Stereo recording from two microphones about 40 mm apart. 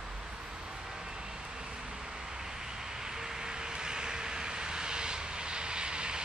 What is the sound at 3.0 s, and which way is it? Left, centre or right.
Vehicle, centre.